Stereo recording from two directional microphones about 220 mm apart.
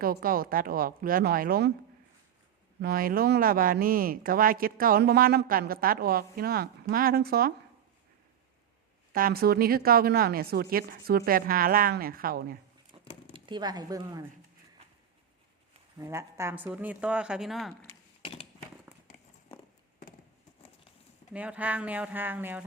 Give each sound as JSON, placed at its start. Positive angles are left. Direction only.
{"t": 0.0, "sound": "speech", "side_deg": -40}
{"t": 2.8, "sound": "speech", "side_deg": -40}
{"t": 9.1, "sound": "a woman's voice", "side_deg": -40}
{"t": 13.3, "sound": "speech", "side_deg": -20}
{"t": 16.0, "sound": "speech", "side_deg": -15}
{"t": 18.2, "sound": "a sound", "side_deg": 25}
{"t": 21.3, "sound": "speech", "side_deg": -5}